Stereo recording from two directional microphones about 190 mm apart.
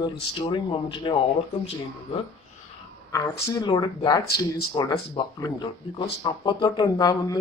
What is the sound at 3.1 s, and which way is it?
Speech, 20° left (ahead or behind).